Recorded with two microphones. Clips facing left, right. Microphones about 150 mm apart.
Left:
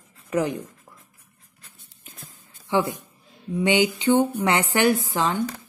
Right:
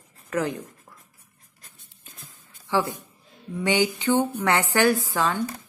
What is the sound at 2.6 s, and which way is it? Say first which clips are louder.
A woman's voice: left 2 dB; 20° left (ahead or behind).